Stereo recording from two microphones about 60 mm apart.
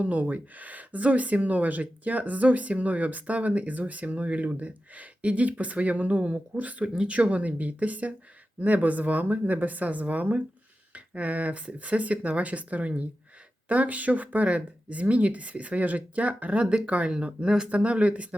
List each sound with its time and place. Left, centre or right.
0.0 s speech: right